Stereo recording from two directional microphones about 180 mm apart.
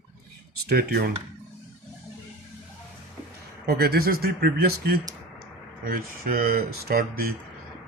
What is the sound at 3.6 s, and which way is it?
Speech, 60° right (ahead or behind).